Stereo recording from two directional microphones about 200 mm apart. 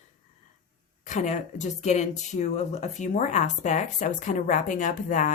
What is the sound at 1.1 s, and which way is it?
Speech, 35° left (ahead or behind).